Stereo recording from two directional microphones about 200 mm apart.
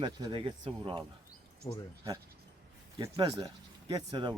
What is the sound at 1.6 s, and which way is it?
Speech, 15° left (ahead or behind).